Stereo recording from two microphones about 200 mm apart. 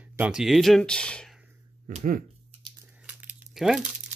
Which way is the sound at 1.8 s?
40° right (ahead or behind).